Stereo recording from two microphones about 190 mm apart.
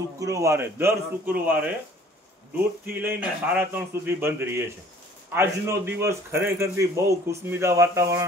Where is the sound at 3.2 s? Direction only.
10° right (ahead or behind).